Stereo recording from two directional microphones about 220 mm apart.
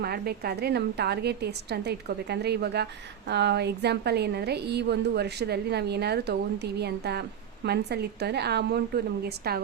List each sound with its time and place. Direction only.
0.0 s a woman's voice: 45° right (ahead or behind)